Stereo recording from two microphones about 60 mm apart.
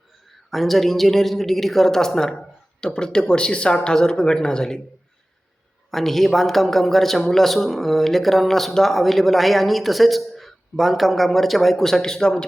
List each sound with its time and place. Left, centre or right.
0.5 s speech: centre
5.9 s a man's voice: centre